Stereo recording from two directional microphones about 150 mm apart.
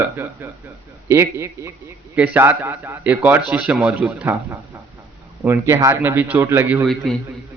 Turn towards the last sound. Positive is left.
turn(degrees=5)  # may be behind; listen again after turning